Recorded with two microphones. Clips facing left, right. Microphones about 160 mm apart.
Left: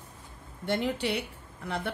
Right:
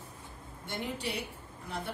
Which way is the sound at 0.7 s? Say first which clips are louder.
Left 8 dB; 75° left (ahead or behind).